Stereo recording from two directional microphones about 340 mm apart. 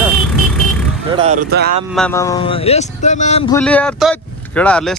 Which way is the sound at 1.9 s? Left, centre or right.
Centre.